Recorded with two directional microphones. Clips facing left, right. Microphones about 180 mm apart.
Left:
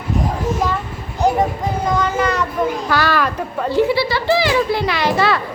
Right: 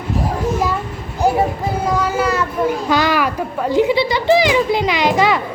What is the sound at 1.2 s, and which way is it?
A child's voice, 5° right (ahead or behind).